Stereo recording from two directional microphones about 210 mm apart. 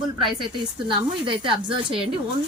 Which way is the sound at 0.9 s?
25° right (ahead or behind).